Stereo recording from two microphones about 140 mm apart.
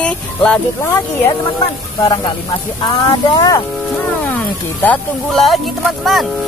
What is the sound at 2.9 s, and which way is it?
Speech, 30° left (ahead or behind).